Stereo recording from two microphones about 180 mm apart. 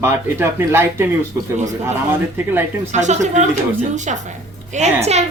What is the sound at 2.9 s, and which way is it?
Speech, 40° right (ahead or behind).